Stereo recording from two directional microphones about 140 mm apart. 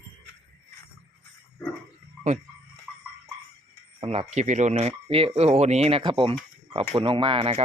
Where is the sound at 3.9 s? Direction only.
45° right (ahead or behind).